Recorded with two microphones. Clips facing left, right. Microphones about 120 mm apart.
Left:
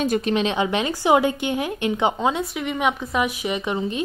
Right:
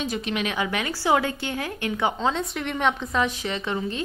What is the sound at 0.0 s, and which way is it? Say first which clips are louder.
Speech: left 7 dB; 50° left (ahead or behind).